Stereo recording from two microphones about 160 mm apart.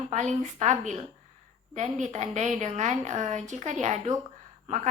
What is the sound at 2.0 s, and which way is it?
A woman's voice, 45° right (ahead or behind).